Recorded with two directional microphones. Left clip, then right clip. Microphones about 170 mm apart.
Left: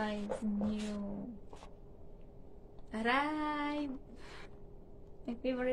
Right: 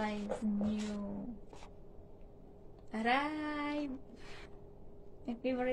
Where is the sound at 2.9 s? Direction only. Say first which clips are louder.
Even; 20° left (ahead or behind).